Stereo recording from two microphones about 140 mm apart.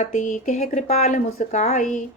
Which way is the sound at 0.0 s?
60° left (ahead or behind).